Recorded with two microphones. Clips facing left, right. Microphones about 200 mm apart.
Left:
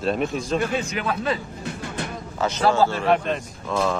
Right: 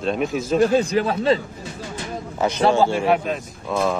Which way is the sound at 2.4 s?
15° right (ahead or behind).